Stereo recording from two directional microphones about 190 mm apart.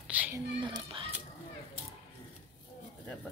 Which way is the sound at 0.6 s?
25° right (ahead or behind).